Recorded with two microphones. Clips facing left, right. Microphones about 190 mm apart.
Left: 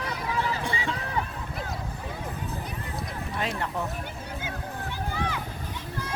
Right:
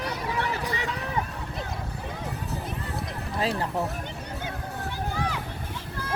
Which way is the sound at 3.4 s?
30° right (ahead or behind).